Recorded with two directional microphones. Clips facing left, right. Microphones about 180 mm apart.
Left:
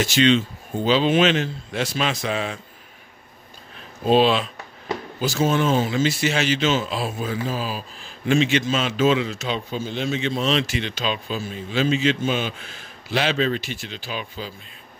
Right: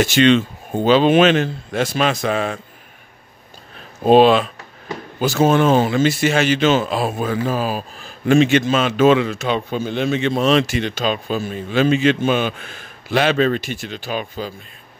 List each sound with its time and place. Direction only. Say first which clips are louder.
0.0 s speech: right 4 dB; 60° right (ahead or behind)
4.0 s speech: right 6 dB; 55° right (ahead or behind)